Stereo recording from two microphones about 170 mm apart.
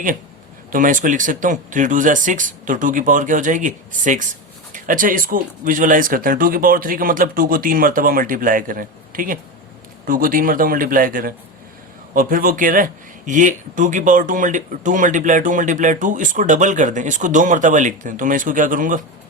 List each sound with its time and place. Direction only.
0.7 s speech: 50° right (ahead or behind)